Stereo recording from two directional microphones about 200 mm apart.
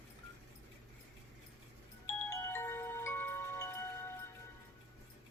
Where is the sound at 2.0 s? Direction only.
10° left (ahead or behind).